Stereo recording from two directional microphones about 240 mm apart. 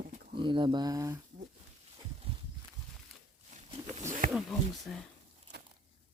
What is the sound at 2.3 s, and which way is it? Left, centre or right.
Walk, right.